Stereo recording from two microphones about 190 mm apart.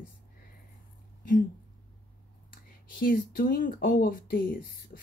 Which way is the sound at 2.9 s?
45° left (ahead or behind).